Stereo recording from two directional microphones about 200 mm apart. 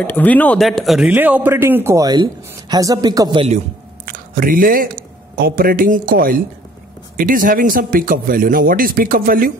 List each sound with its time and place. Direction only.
0.0 s speech: 10° left (ahead or behind); by 3.6 s 30° right (ahead or behind)
4.0 s speech: 45° right (ahead or behind)